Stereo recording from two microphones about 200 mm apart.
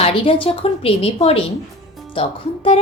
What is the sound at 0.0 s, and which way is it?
Speech, 25° left (ahead or behind).